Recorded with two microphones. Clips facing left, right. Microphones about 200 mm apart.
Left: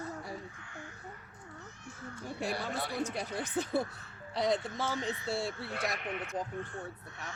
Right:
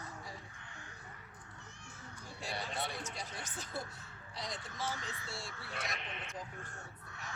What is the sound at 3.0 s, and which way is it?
Speech, 60° left (ahead or behind).